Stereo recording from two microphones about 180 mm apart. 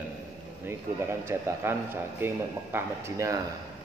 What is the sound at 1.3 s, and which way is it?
A man's voice, 15° right (ahead or behind).